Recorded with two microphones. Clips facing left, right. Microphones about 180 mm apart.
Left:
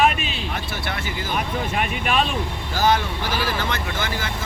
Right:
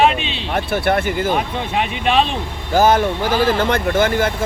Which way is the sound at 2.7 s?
50° right (ahead or behind).